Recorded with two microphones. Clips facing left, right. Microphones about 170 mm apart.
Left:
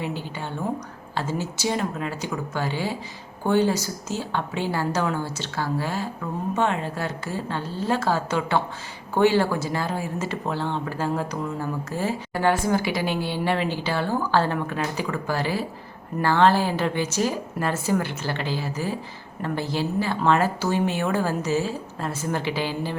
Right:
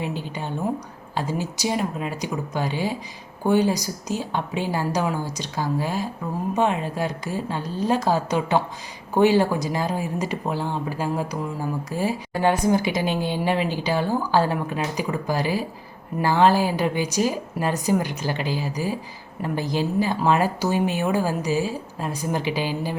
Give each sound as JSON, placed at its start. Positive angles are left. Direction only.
{"t": 0.0, "sound": "a woman's voice", "side_deg": -15}